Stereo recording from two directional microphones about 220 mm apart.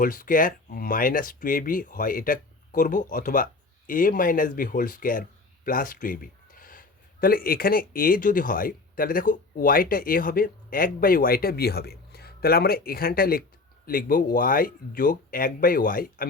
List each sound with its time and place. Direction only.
0.0 s speech: 40° left (ahead or behind)